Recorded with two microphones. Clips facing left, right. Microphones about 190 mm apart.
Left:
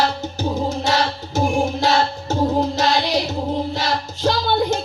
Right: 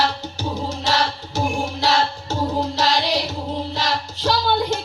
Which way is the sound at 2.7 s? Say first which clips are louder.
Left 2 dB; 50° left (ahead or behind).